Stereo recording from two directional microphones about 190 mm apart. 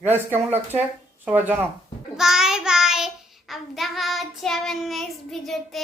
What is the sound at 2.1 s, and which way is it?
Child singing, centre (ahead or behind).